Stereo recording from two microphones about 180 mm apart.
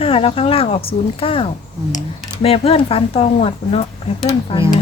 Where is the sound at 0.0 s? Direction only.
30° left (ahead or behind).